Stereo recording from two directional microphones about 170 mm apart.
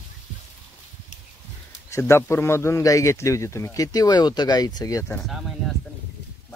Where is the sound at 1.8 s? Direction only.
15° left (ahead or behind).